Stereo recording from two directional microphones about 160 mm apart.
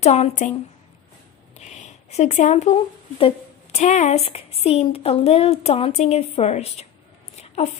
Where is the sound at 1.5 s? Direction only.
45° left (ahead or behind).